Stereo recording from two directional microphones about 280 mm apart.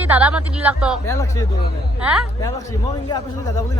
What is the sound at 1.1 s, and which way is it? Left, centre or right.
A man's voice, centre.